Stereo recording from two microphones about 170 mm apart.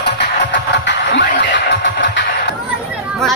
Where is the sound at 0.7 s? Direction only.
90° left.